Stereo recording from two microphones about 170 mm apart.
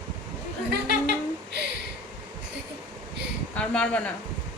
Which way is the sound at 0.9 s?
80° right.